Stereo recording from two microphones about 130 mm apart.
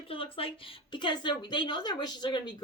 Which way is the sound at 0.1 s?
45° left (ahead or behind).